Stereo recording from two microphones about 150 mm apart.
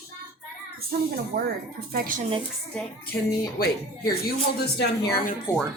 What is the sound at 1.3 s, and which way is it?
Speech, 65° right (ahead or behind).